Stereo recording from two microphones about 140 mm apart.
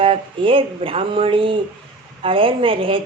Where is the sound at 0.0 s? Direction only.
40° right (ahead or behind).